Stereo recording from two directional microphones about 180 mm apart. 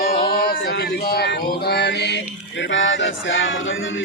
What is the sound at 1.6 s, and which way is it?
Music, 70° left (ahead or behind).